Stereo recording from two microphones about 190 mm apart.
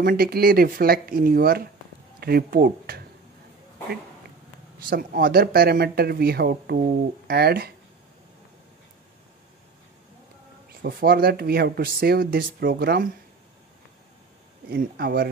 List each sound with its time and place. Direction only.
0.0 s speech: 50° right (ahead or behind)
4.8 s speech: 50° right (ahead or behind)
10.8 s speech: 60° right (ahead or behind)
14.7 s speech: 55° right (ahead or behind)